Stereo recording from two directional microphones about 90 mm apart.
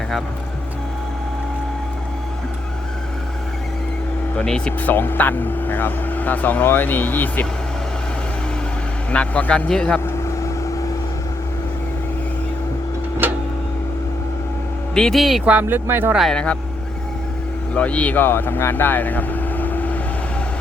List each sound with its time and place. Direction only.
4.4 s speech: 10° left (ahead or behind)
9.1 s a man's voice: 15° left (ahead or behind)
13.2 s tick-tock: 20° right (ahead or behind)
14.9 s a man's voice: 5° left (ahead or behind)
15.4 s speech: 20° right (ahead or behind)
16.3 s a man's voice: 10° left (ahead or behind)
17.7 s speech: 15° left (ahead or behind)